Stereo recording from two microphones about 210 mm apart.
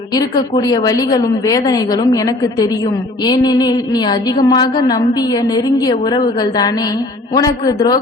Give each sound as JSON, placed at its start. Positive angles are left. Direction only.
{"t": 0.1, "sound": "a woman's voice", "side_deg": 20}